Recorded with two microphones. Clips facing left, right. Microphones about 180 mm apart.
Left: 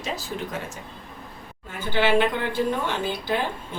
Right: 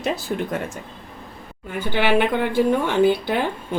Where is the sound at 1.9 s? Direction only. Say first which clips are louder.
Right 2 dB; 55° right (ahead or behind).